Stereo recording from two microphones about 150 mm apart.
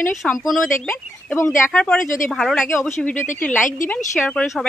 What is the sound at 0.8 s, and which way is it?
Speech, 15° left (ahead or behind).